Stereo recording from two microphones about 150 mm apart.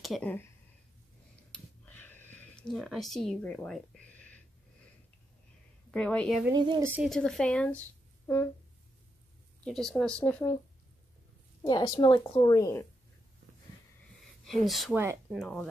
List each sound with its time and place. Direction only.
0.0 s speech: centre (ahead or behind)
1.5 s a sound: 10° left (ahead or behind)
5.9 s a woman's voice: 5° left (ahead or behind)
6.5 s a woman's voice: 30° right (ahead or behind)
6.8 s speech: 10° right (ahead or behind)
7.1 s speech: 5° left (ahead or behind)
9.7 s speech: 5° left (ahead or behind)
11.6 s speech: 25° left (ahead or behind)
14.4 s speech: centre (ahead or behind)